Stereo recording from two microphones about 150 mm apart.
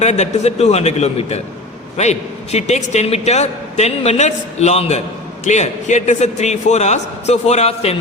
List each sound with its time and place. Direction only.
0.0 s a man's voice: 50° left (ahead or behind)